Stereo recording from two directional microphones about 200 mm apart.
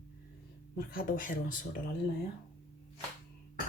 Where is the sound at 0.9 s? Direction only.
45° left (ahead or behind).